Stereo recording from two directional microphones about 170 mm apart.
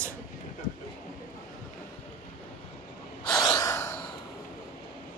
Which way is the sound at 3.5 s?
15° left (ahead or behind).